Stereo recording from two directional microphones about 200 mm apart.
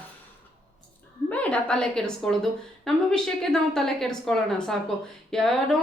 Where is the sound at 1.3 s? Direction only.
5° left (ahead or behind).